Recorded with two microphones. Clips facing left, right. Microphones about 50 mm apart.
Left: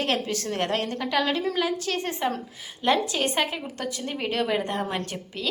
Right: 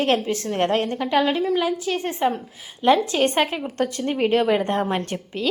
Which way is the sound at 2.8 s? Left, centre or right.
Right.